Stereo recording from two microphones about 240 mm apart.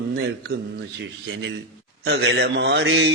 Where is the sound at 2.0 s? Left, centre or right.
Right.